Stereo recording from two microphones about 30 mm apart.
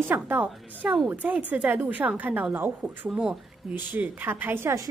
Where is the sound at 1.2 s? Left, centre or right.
Right.